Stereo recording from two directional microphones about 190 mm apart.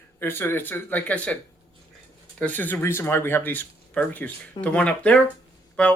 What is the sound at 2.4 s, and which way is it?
Speech, 10° left (ahead or behind).